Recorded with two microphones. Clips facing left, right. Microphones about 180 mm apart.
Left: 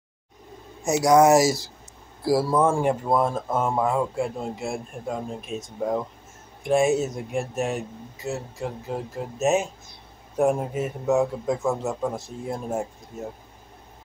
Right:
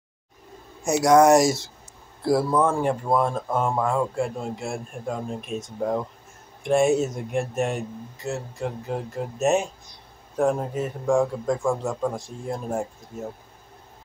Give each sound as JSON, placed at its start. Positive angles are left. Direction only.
{"t": 0.8, "sound": "speech", "side_deg": 0}